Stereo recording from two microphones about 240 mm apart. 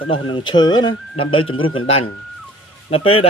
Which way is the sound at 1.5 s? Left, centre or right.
Left.